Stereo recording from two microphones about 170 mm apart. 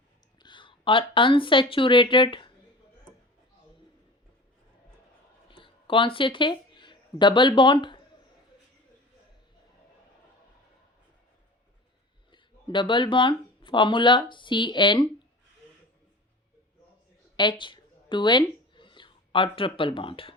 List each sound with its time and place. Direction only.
0.3 s speech: 25° left (ahead or behind)
5.5 s a sound: 30° left (ahead or behind)
12.3 s speech: 30° left (ahead or behind)
17.3 s speech: 25° left (ahead or behind)